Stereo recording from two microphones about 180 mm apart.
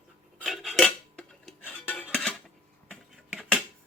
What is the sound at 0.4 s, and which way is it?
Cutlery, centre (ahead or behind).